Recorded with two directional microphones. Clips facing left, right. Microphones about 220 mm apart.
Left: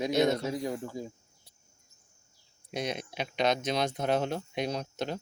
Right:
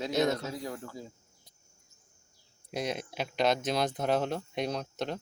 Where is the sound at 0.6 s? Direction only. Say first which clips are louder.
Left 5 dB; 20° left (ahead or behind).